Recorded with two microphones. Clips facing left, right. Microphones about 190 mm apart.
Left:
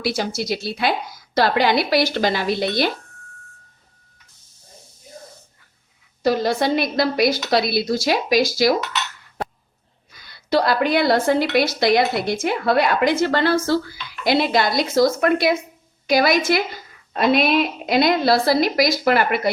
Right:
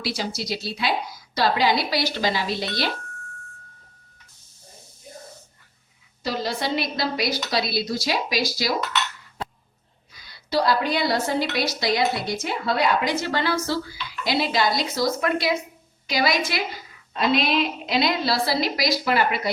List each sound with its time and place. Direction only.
0.0 s a woman's voice: 50° left (ahead or behind)
6.2 s a woman's voice: 50° left (ahead or behind)
10.2 s a woman's voice: 55° left (ahead or behind)